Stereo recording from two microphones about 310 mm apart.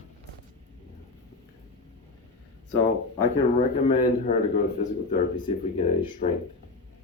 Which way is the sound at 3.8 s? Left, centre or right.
Left.